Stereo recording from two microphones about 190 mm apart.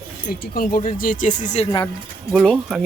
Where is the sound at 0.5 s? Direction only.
50° left (ahead or behind).